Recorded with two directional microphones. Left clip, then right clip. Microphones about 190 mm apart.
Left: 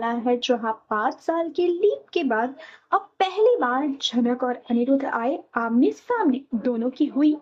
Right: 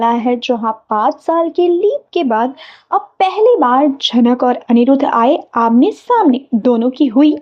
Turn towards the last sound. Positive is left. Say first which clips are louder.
# right 10 dB
turn(degrees=-30)  # may be behind; listen again after turning